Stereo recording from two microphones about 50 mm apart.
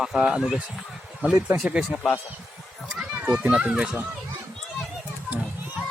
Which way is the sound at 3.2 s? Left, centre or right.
Right.